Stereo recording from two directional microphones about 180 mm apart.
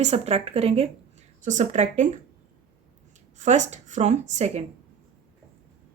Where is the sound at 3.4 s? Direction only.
40° right (ahead or behind).